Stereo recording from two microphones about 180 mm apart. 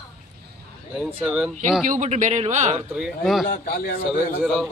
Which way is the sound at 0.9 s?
Centre (ahead or behind).